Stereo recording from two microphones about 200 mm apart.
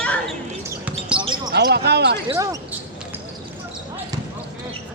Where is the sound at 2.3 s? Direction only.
15° right (ahead or behind).